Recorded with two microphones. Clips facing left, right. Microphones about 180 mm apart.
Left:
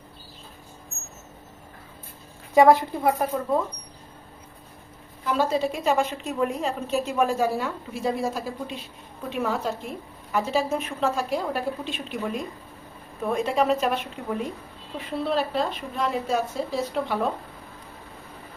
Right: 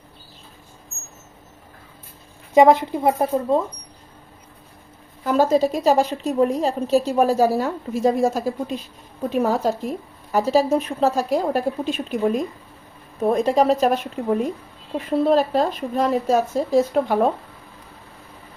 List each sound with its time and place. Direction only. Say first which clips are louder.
2.6 s speech: right 3 dB; 20° right (ahead or behind)
5.2 s a woman's voice: right 6 dB; 45° right (ahead or behind)